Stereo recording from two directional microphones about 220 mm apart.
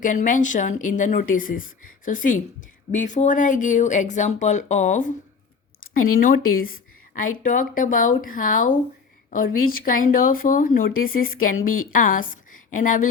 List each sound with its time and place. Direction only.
0.0 s a woman's voice: 35° left (ahead or behind)